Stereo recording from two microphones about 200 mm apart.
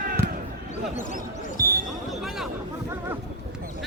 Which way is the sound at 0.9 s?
40° left (ahead or behind).